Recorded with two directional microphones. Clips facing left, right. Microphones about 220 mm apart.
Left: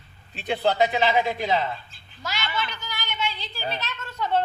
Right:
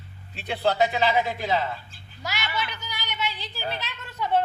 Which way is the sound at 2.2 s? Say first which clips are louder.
Left 1 dB; 15° right (ahead or behind).